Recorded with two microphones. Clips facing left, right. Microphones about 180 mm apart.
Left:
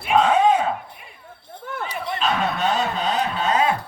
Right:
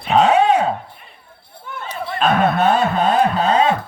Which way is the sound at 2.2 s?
55° right (ahead or behind).